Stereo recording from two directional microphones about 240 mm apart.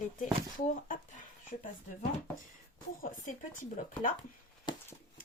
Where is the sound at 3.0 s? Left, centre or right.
Left.